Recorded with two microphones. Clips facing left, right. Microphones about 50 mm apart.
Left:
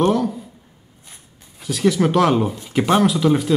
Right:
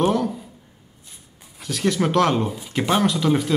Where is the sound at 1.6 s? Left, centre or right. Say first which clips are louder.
Left 4 dB; centre.